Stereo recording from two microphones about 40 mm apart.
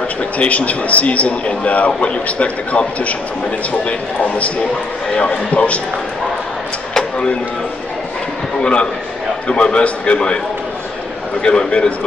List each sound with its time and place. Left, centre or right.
0.4 s a man's voice: left
8.5 s a man's voice: left
11.4 s a man's voice: left